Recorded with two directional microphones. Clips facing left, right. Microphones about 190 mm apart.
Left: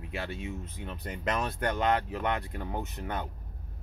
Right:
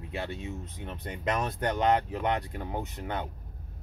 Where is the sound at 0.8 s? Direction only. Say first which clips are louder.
Right 1 dB; 25° right (ahead or behind).